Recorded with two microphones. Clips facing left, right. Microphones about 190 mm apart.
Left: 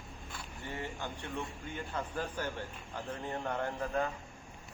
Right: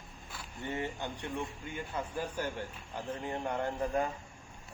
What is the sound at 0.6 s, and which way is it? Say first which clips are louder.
Speech: right 4 dB; 20° right (ahead or behind).